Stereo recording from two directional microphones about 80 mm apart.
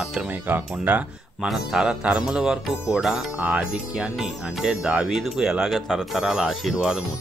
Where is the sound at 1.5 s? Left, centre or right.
Centre.